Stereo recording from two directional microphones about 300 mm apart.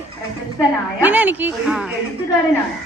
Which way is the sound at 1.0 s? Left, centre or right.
Centre.